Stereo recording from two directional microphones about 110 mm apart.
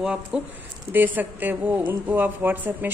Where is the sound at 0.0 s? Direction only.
10° right (ahead or behind).